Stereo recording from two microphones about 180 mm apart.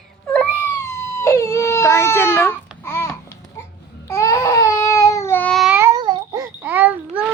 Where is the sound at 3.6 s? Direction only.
15° left (ahead or behind).